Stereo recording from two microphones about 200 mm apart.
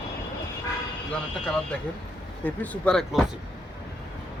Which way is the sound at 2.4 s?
10° left (ahead or behind).